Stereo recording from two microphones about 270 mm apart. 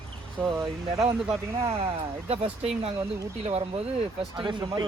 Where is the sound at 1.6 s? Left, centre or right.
Centre.